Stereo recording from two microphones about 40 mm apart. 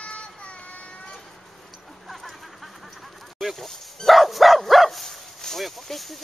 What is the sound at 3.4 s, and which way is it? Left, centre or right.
Goose, centre.